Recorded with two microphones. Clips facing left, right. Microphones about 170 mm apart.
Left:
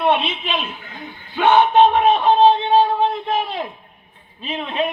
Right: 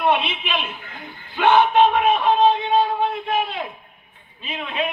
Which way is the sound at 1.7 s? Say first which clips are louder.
Left 3 dB; 35° left (ahead or behind).